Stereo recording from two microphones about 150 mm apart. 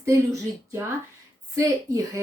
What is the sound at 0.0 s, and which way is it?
Speech, 20° right (ahead or behind).